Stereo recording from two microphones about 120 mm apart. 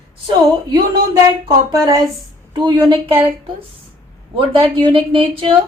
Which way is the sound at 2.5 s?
40° right (ahead or behind).